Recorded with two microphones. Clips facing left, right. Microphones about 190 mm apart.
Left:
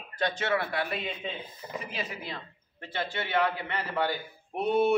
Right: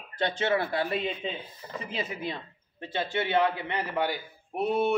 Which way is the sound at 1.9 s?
20° right (ahead or behind).